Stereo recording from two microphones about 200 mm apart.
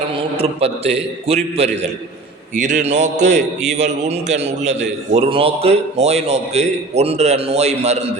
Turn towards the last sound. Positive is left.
turn(degrees=-35)  # may be behind; listen again after turning